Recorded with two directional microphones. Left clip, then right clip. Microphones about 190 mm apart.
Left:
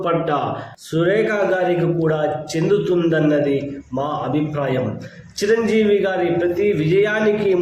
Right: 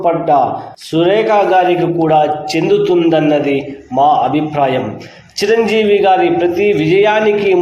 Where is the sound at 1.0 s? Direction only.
70° right (ahead or behind).